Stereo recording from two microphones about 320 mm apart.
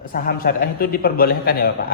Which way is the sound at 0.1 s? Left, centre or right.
Left.